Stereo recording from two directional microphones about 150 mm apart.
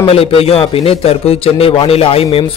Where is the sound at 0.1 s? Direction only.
40° left (ahead or behind).